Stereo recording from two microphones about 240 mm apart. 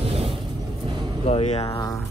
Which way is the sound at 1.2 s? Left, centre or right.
Left.